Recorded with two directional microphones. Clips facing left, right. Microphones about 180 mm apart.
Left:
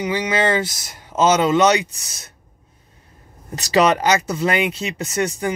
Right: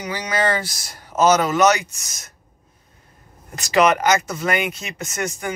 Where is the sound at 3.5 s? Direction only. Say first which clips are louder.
Left 1 dB; 35° left (ahead or behind).